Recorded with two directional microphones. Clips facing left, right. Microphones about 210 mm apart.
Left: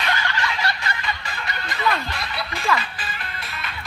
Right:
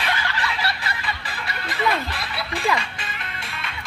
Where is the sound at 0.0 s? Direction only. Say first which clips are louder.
Left 1 dB; centre (ahead or behind).